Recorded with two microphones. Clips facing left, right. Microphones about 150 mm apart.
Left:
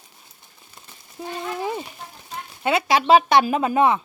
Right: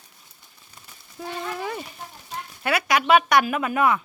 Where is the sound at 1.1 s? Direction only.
20° left (ahead or behind).